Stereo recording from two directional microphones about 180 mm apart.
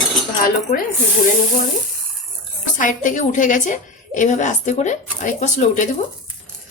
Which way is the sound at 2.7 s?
45° left (ahead or behind).